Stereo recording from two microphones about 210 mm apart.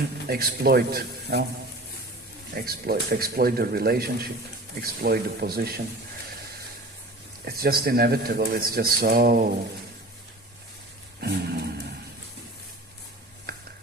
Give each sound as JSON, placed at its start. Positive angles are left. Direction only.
{"t": 0.3, "sound": "speech", "side_deg": -45}
{"t": 2.6, "sound": "speech", "side_deg": -45}
{"t": 7.4, "sound": "speech", "side_deg": -45}
{"t": 11.2, "sound": "dog", "side_deg": -50}